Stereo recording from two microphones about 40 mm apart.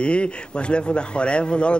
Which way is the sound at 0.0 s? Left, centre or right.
Left.